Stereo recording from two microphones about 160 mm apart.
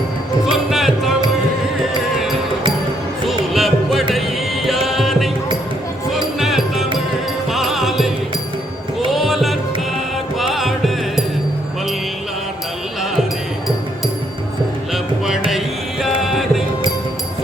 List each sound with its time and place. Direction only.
0.5 s music: centre (ahead or behind)
3.2 s music: centre (ahead or behind)
6.4 s music: centre (ahead or behind)
9.1 s music: centre (ahead or behind)
14.9 s music: centre (ahead or behind)